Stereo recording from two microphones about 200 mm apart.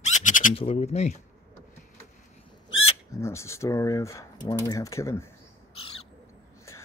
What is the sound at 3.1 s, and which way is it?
Speech, 15° left (ahead or behind).